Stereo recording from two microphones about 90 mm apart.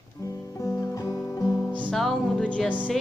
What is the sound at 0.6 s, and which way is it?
Guitar, 40° left (ahead or behind).